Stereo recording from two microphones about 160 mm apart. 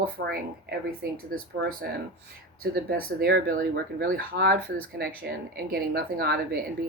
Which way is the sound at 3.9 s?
65° right (ahead or behind).